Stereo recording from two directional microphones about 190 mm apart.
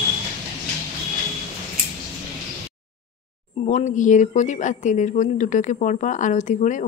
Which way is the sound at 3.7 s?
40° left (ahead or behind).